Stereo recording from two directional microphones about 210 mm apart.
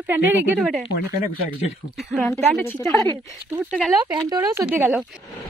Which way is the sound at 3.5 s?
5° right (ahead or behind).